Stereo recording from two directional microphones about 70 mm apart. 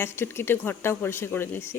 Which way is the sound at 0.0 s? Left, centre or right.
Left.